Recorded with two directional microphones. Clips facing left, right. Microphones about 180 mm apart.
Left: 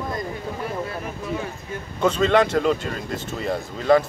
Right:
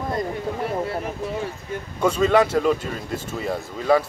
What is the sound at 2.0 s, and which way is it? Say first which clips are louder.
Speech: even; 5° right (ahead or behind).